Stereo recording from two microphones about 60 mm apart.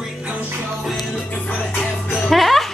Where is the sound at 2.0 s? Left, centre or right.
Centre.